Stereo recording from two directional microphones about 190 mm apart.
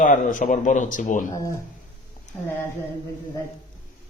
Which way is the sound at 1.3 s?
15° left (ahead or behind).